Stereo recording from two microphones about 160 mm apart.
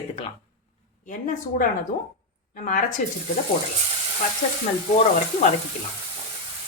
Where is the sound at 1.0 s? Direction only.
55° left (ahead or behind).